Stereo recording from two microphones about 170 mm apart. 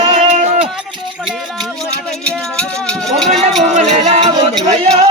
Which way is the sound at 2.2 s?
5° left (ahead or behind).